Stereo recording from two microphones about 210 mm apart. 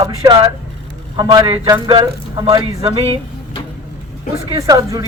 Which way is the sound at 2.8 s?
25° right (ahead or behind).